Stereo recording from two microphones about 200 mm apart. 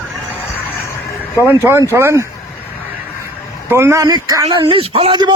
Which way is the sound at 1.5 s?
10° right (ahead or behind).